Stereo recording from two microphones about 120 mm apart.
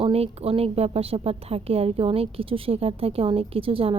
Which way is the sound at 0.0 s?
55° right (ahead or behind).